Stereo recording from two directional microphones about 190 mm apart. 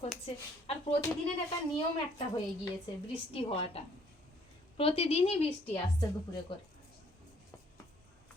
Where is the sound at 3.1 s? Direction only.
30° left (ahead or behind).